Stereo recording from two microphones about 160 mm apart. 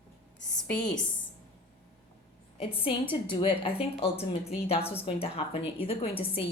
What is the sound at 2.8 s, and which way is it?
A woman's voice, 30° left (ahead or behind).